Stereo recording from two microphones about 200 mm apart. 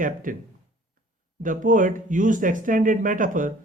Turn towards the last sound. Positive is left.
turn(degrees=-40)  # may be behind; listen again after turning